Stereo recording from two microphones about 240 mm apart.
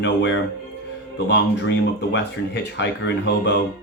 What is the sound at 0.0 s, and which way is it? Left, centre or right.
Speech, left.